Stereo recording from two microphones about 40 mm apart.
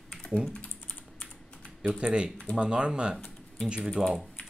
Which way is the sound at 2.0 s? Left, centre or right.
Right.